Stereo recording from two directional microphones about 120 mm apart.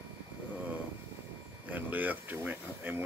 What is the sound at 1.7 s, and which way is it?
Speech, 15° right (ahead or behind).